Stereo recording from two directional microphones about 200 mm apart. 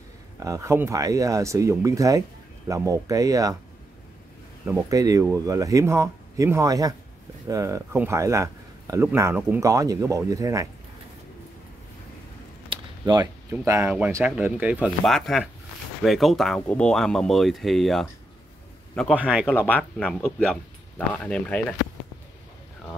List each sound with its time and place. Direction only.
0.4 s speech: 15° right (ahead or behind)
4.6 s speech: 15° right (ahead or behind)
12.6 s speech: 20° right (ahead or behind); by 18.0 s centre (ahead or behind)
19.1 s speech: 5° right (ahead or behind)
19.4 s speech: 5° left (ahead or behind)